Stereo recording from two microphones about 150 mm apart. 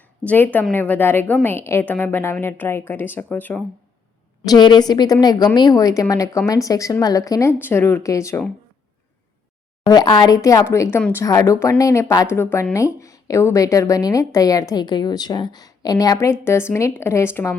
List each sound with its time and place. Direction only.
0.3 s a woman's voice: 10° left (ahead or behind)
4.4 s a woman's voice: 30° left (ahead or behind)
9.8 s a woman's voice: 25° left (ahead or behind)